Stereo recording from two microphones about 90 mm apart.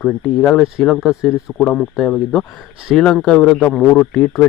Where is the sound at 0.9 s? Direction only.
Centre (ahead or behind).